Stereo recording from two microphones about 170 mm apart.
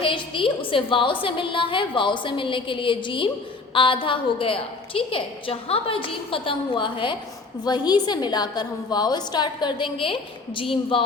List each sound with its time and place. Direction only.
0.0 s a woman's voice: 30° left (ahead or behind)